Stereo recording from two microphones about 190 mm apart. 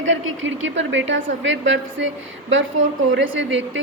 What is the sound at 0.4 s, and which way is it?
A woman's voice, 80° right.